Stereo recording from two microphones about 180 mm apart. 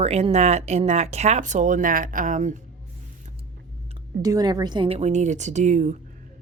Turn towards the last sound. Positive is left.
turn(degrees=-40)  # may be behind; listen again after turning